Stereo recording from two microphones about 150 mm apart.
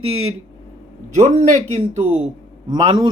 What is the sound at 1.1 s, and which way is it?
Speech, 50° right (ahead or behind).